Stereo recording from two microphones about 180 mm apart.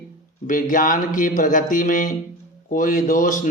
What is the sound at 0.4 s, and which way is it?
Speech, 45° left (ahead or behind).